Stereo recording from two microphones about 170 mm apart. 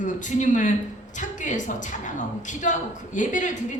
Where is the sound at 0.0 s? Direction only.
45° left (ahead or behind).